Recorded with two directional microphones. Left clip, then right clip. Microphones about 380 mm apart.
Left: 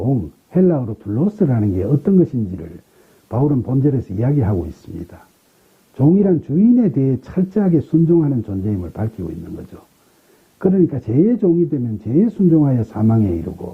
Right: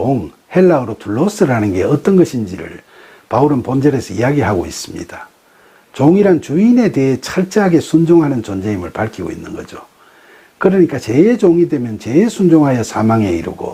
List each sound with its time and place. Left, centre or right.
0.5 s speech: centre
6.2 s speech: centre